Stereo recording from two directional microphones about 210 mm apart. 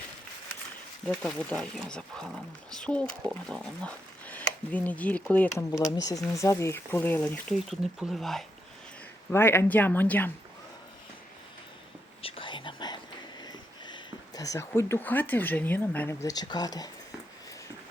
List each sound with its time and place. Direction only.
1.0 s speech: 5° left (ahead or behind)
12.2 s whispering: 25° left (ahead or behind)
14.3 s speech: 15° left (ahead or behind)